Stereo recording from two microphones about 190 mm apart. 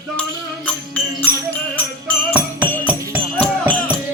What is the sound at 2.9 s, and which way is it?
Music, 10° right (ahead or behind).